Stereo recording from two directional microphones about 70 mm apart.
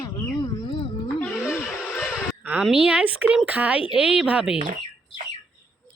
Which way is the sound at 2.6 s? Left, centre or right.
Centre.